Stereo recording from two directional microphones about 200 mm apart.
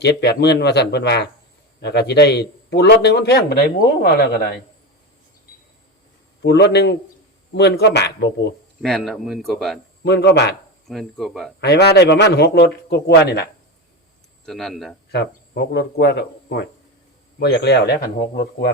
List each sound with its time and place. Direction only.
0.0 s a man's voice: 55° left (ahead or behind)
6.4 s a man's voice: 55° left (ahead or behind)
8.8 s speech: centre (ahead or behind)
10.0 s a man's voice: 55° left (ahead or behind)
10.8 s speech: centre (ahead or behind)
11.6 s a man's voice: 55° left (ahead or behind)
14.4 s speech: centre (ahead or behind)
15.1 s a man's voice: 55° left (ahead or behind)